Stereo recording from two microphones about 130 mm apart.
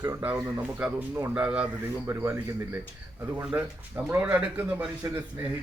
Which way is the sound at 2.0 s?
20° right (ahead or behind).